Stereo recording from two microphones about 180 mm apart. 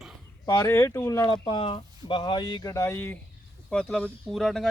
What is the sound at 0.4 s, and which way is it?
Speech, 20° left (ahead or behind).